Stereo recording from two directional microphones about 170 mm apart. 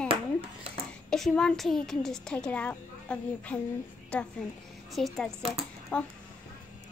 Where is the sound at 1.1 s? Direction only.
5° left (ahead or behind).